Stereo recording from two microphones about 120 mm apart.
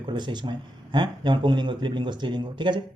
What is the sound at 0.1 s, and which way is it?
Speech, 40° right (ahead or behind).